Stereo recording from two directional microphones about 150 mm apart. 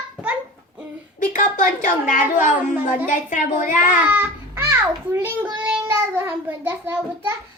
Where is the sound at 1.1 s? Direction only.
60° left (ahead or behind).